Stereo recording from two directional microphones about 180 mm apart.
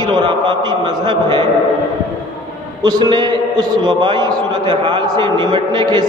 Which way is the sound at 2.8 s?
25° right (ahead or behind).